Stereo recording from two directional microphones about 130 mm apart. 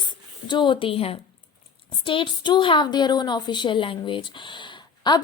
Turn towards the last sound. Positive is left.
turn(degrees=35)  # may be behind; listen again after turning